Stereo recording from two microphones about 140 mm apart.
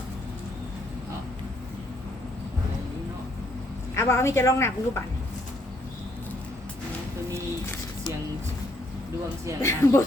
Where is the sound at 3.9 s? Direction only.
20° left (ahead or behind).